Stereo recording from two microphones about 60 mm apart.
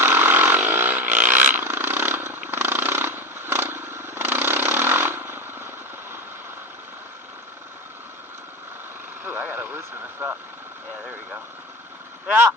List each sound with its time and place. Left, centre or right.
0.0 s vehicle: right
9.2 s radio: right